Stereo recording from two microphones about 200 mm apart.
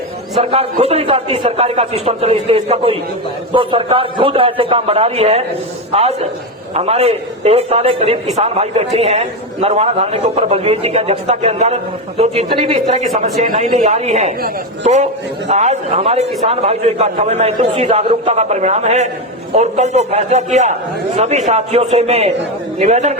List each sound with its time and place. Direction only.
0.3 s a man's voice: 30° right (ahead or behind)